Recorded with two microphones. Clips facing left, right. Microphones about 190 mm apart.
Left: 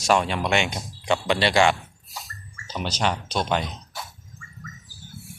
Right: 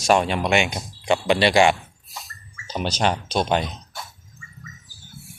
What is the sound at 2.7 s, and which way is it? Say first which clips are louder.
Speech: right 3 dB; 30° right (ahead or behind).